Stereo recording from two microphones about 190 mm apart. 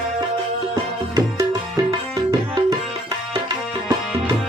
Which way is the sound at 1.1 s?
20° right (ahead or behind).